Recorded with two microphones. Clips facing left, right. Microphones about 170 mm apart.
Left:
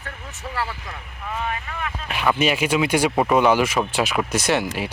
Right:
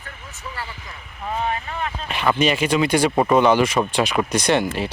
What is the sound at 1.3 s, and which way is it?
Speech, 35° right (ahead or behind).